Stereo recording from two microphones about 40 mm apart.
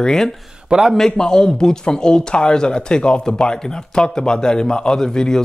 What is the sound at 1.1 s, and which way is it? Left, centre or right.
Speech, centre.